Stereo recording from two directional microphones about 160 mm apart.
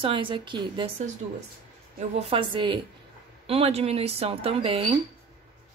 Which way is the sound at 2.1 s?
35° right (ahead or behind).